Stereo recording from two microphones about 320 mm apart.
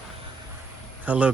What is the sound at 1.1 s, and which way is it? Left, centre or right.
Speech, centre.